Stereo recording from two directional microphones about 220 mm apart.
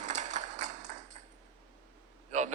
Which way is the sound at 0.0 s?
35° right (ahead or behind).